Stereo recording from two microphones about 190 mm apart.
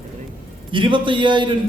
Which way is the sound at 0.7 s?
25° right (ahead or behind).